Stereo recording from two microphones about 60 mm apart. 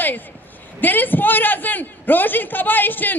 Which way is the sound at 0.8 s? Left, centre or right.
Left.